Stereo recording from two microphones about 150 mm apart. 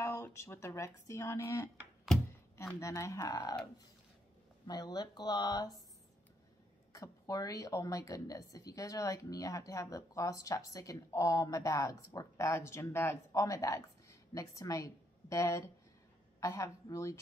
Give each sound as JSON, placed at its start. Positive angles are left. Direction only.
{"t": 0.0, "sound": "a woman's voice", "side_deg": 20}
{"t": 4.6, "sound": "a woman's voice", "side_deg": 25}
{"t": 6.9, "sound": "a woman's voice", "side_deg": 20}